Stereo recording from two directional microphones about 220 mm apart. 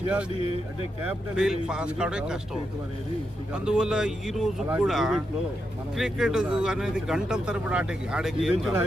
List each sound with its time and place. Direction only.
1.4 s speech: 5° right (ahead or behind)
3.5 s speech: 5° right (ahead or behind)